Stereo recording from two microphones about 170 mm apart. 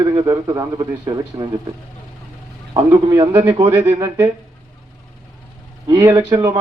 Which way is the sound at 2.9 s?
20° right (ahead or behind).